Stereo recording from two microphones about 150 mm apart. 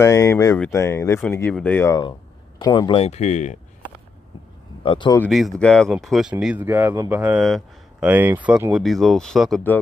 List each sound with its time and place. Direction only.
0.0 s speech: 20° left (ahead or behind)
2.6 s speech: 25° left (ahead or behind)
3.0 s speech: 45° left (ahead or behind)
4.8 s speech: 30° left (ahead or behind)
5.3 s speech: centre (ahead or behind)
6.3 s speech: 10° right (ahead or behind)
7.4 s a sound: centre (ahead or behind)
8.1 s speech: 10° right (ahead or behind)
8.7 s speech: centre (ahead or behind)